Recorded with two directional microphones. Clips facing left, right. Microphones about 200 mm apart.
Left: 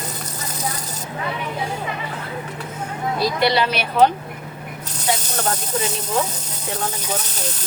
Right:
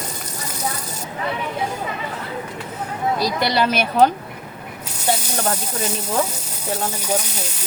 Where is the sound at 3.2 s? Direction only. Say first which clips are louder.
Left 3 dB; 45° right (ahead or behind).